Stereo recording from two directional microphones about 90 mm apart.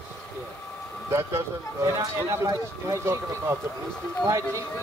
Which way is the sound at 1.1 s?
30° right (ahead or behind).